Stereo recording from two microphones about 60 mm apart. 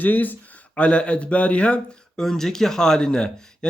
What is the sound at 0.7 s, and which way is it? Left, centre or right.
Speech, centre.